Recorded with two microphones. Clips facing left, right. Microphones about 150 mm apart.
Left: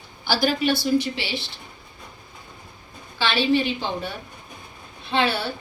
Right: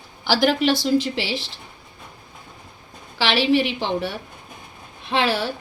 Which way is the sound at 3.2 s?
90° right.